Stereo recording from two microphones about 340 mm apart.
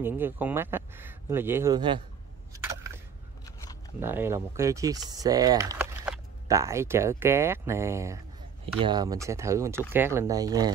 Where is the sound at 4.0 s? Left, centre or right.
Centre.